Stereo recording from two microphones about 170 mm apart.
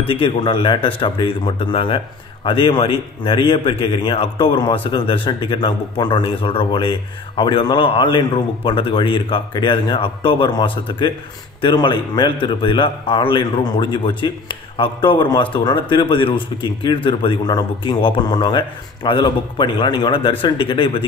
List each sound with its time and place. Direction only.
0.0 s a man's voice: 30° left (ahead or behind)